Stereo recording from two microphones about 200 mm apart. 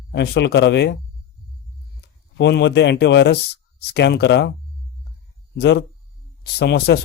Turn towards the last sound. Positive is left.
turn(degrees=60)  # may be behind; listen again after turning